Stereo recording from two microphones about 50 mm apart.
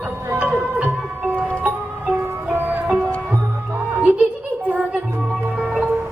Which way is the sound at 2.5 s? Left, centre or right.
Right.